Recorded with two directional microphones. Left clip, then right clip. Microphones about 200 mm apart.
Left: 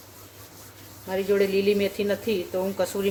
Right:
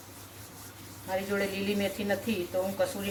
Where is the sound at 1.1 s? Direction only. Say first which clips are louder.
Left 8 dB; 50° left (ahead or behind).